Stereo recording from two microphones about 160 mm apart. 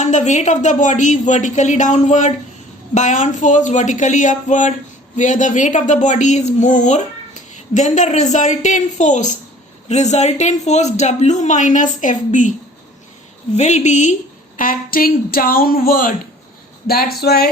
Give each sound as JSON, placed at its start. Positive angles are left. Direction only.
{"t": 0.0, "sound": "speech", "side_deg": 50}
{"t": 13.6, "sound": "a woman's voice", "side_deg": 45}